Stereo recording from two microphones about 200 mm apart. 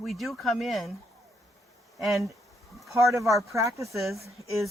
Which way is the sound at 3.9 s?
Centre (ahead or behind).